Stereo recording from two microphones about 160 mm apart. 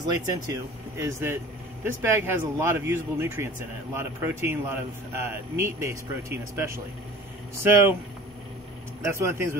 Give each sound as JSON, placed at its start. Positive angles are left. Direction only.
{"t": 0.3, "sound": "speech", "side_deg": -20}
{"t": 9.0, "sound": "speech", "side_deg": -15}